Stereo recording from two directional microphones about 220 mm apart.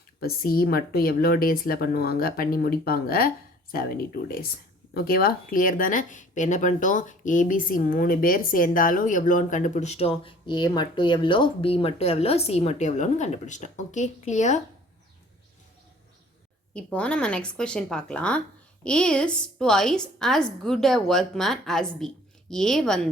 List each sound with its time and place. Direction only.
0.2 s speech: 40° left (ahead or behind)
16.7 s a woman's voice: 5° left (ahead or behind)